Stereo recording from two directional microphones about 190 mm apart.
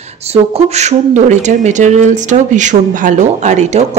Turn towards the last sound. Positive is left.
turn(degrees=-40)  # may be behind; listen again after turning